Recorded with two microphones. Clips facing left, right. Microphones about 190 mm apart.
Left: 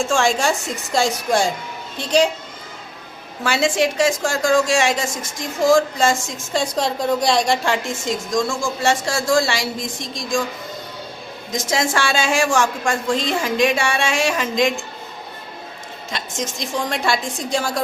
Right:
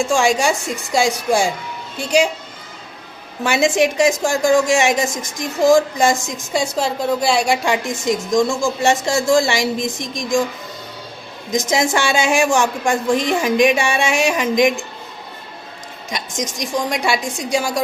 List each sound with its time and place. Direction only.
0.0 s a woman's voice: 15° right (ahead or behind)
3.4 s a woman's voice: 20° right (ahead or behind)
11.5 s a woman's voice: 20° right (ahead or behind)
16.0 s a woman's voice: 15° right (ahead or behind)